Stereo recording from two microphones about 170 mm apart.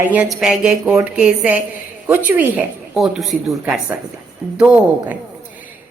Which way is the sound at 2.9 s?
Centre (ahead or behind).